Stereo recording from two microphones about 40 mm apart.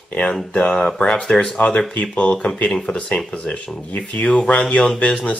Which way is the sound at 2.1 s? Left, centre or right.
Left.